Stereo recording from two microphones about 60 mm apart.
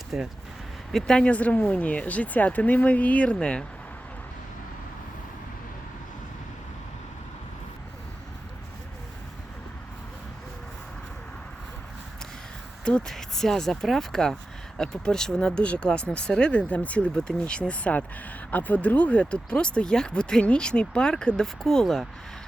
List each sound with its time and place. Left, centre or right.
0.1 s speech: centre
0.9 s speech: centre
3.3 s speech: centre
12.8 s speech: centre